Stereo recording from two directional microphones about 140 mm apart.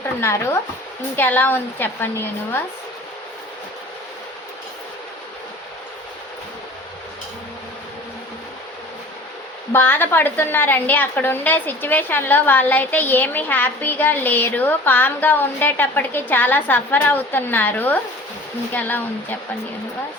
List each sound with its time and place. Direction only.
0.2 s a woman's voice: 20° left (ahead or behind)
9.7 s a woman's voice: 15° left (ahead or behind)